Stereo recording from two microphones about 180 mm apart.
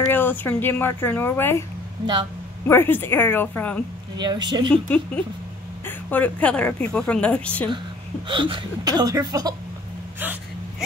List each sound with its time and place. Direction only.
0.1 s a woman's voice: 10° left (ahead or behind)
2.7 s a woman's voice: 10° left (ahead or behind)
4.2 s speech: 25° right (ahead or behind)
4.8 s a woman's voice: 5° left (ahead or behind)
8.3 s speech: 25° right (ahead or behind)